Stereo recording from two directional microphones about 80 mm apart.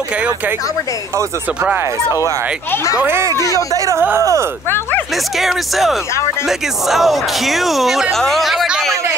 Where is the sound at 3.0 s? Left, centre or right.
Right.